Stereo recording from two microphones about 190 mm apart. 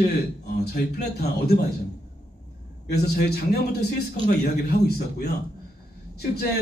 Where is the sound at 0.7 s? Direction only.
60° left (ahead or behind).